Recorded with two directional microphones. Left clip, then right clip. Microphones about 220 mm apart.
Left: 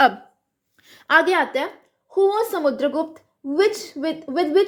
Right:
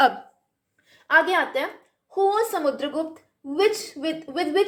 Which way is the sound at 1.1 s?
50° left (ahead or behind).